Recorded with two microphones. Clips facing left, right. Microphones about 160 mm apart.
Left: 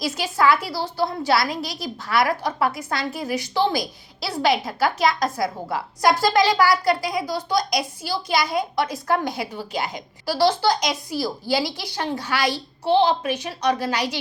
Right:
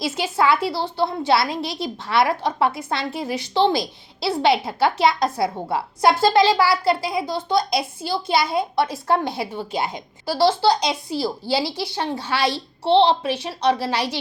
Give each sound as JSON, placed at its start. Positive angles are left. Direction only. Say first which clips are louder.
{"t": 0.0, "sound": "a woman's voice", "louder": "even", "side_deg": -25}